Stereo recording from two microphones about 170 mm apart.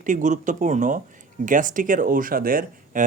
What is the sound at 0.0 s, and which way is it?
Speech, 50° right (ahead or behind).